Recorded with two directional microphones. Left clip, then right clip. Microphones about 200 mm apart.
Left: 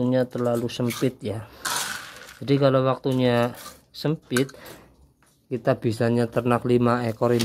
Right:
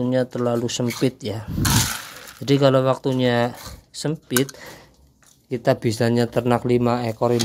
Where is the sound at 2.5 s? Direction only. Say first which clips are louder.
Right 3 dB; 5° right (ahead or behind).